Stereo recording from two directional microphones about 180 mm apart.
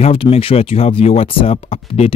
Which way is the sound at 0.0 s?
30° left (ahead or behind).